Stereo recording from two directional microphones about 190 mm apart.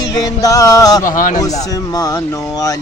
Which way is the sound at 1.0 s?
45° left (ahead or behind).